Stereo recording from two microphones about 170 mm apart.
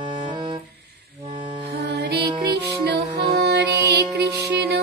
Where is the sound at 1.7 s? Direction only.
75° right (ahead or behind).